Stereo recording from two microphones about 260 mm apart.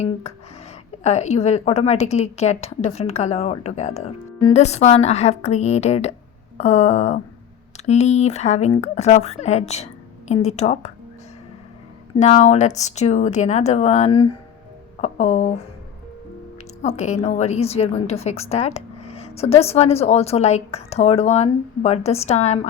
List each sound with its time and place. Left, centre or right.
0.0 s a woman's voice: left
12.1 s a woman's voice: left
16.8 s a woman's voice: left